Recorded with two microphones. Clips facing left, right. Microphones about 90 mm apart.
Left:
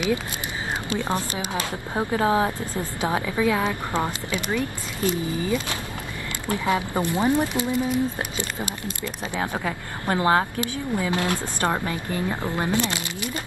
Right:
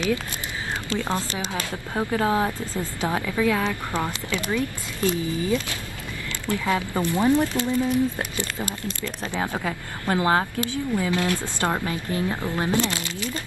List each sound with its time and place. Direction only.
0.8 s speech: 20° left (ahead or behind)